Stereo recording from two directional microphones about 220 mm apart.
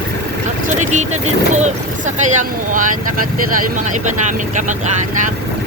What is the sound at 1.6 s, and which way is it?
Speech, 35° right (ahead or behind).